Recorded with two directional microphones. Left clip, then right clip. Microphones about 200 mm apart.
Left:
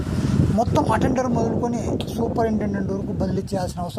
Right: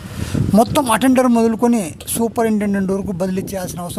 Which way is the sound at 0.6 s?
70° right (ahead or behind).